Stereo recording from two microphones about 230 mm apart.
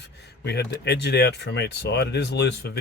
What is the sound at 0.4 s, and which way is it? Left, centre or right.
Speech, left.